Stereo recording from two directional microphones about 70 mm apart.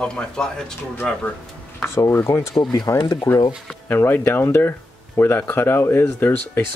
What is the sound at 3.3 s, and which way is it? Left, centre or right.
Speech, left.